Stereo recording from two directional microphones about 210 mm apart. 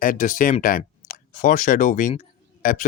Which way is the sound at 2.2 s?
40° left (ahead or behind).